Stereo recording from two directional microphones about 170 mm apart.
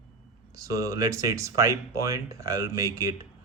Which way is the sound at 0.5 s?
20° right (ahead or behind).